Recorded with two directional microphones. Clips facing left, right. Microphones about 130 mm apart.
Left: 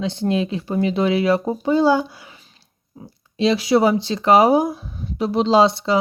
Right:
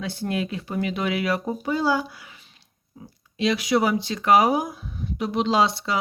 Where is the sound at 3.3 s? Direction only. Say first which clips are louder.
Left 5 dB; 30° left (ahead or behind).